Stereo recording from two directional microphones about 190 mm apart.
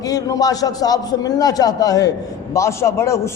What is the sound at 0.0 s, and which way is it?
A man's voice, 20° left (ahead or behind).